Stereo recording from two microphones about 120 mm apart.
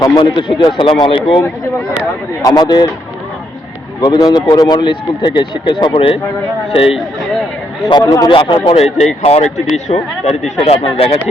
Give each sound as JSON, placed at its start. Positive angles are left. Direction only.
{"t": 0.2, "sound": "speech", "side_deg": 40}
{"t": 2.4, "sound": "speech", "side_deg": 35}
{"t": 4.0, "sound": "speech", "side_deg": 30}
{"t": 8.0, "sound": "speech", "side_deg": 25}
{"t": 8.3, "sound": "speech", "side_deg": 45}
{"t": 8.8, "sound": "speech", "side_deg": 60}